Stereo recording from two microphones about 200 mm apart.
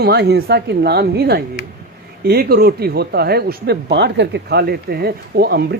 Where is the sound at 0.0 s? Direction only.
55° right (ahead or behind).